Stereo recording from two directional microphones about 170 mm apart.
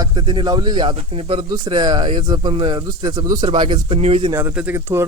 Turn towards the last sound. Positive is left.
turn(degrees=-15)  # may be behind; listen again after turning